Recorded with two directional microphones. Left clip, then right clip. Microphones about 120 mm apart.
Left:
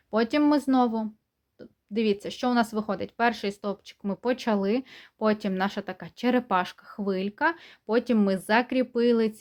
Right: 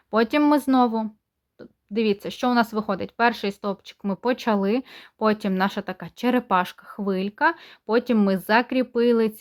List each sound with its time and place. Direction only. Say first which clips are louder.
0.1 s speech: right 4 dB; 30° right (ahead or behind)